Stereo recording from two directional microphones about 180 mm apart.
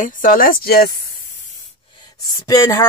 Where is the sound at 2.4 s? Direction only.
15° left (ahead or behind).